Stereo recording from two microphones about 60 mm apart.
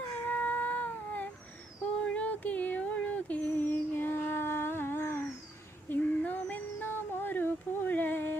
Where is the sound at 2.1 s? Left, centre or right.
Left.